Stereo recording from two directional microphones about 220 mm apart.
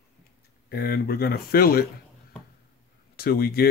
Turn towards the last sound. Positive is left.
turn(degrees=45)  # may be behind; listen again after turning